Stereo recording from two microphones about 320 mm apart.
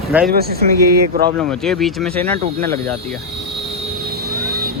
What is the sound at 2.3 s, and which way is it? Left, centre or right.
Speech, right.